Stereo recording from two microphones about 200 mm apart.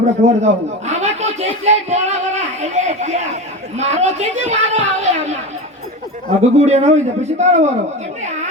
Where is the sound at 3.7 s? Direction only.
35° right (ahead or behind).